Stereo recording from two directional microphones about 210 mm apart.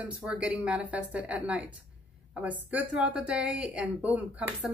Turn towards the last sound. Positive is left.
turn(degrees=-5)  # may be behind; listen again after turning